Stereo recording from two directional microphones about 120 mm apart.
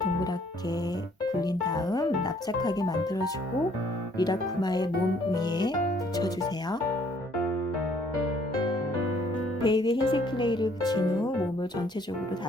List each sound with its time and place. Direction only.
1.4 s speech: 35° left (ahead or behind)
9.6 s speech: 40° left (ahead or behind)